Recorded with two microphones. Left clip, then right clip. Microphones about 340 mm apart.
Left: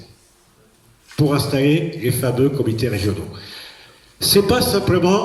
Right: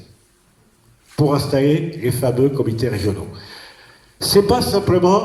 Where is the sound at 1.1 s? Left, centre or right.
Centre.